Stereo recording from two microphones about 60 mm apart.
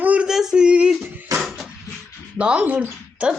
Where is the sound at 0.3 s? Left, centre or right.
Centre.